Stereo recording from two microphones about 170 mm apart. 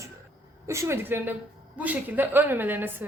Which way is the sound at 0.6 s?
15° right (ahead or behind).